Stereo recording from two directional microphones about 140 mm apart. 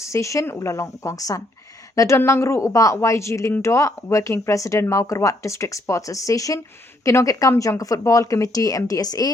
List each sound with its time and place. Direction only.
0.0 s speech: 20° left (ahead or behind)